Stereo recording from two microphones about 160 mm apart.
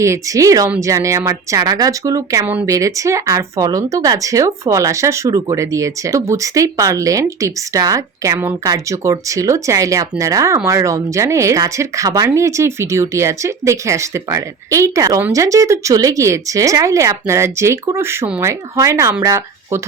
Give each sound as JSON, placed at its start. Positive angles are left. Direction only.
{"t": 0.0, "sound": "speech", "side_deg": -20}